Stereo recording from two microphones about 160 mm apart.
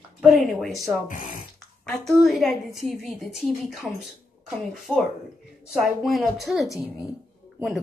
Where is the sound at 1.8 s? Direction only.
Centre (ahead or behind).